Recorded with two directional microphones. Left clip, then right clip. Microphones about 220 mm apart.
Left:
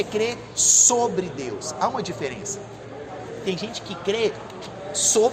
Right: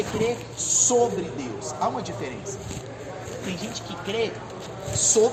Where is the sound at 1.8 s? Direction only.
50° left (ahead or behind).